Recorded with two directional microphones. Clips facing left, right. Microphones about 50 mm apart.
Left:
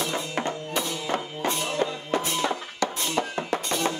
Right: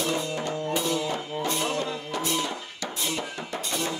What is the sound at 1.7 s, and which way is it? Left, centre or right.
Music, left.